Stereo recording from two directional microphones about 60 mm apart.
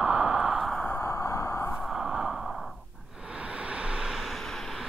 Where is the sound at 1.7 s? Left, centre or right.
Centre.